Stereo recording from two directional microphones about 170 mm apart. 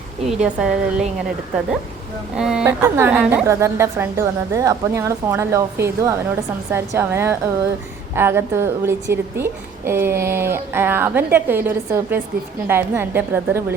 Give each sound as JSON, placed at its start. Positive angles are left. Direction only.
{"t": 0.3, "sound": "a woman's voice", "side_deg": -5}